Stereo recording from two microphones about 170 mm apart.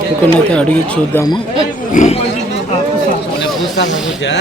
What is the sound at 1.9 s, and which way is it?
Speech, 40° left (ahead or behind).